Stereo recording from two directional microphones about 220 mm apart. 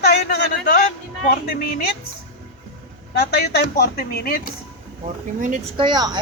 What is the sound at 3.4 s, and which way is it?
A man's voice, 45° left (ahead or behind).